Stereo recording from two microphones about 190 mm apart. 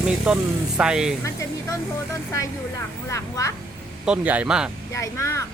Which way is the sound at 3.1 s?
15° left (ahead or behind).